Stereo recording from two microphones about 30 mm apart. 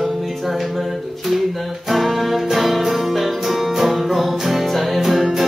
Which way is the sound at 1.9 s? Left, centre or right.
Centre.